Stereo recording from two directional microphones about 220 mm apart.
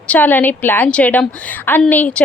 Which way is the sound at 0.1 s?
10° left (ahead or behind).